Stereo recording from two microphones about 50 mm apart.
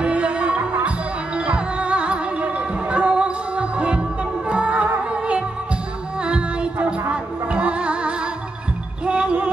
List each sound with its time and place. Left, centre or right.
0.0 s music: right